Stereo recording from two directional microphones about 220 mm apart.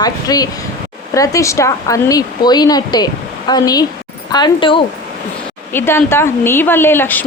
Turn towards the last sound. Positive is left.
turn(degrees=10)  # may be behind; listen again after turning